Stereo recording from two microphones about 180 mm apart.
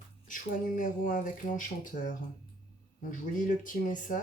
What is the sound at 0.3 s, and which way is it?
Speech, 50° left (ahead or behind).